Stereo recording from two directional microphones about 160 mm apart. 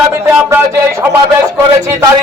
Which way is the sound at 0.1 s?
10° right (ahead or behind).